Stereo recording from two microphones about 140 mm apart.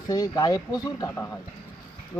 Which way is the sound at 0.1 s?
25° left (ahead or behind).